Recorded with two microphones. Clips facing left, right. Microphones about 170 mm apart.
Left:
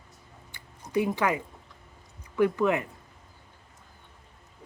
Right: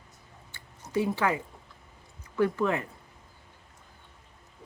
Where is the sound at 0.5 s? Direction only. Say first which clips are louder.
Left 2 dB; 20° left (ahead or behind).